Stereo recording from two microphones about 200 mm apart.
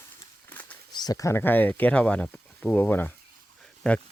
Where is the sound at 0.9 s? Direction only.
20° left (ahead or behind).